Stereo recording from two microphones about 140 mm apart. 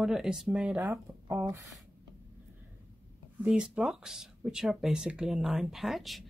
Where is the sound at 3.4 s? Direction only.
5° right (ahead or behind).